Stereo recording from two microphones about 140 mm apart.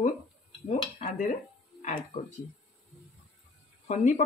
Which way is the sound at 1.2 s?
60° left (ahead or behind).